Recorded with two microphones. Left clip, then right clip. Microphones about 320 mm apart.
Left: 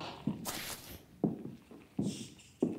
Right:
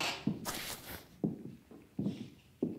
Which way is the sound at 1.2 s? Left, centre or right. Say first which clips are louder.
Left 3 dB; centre.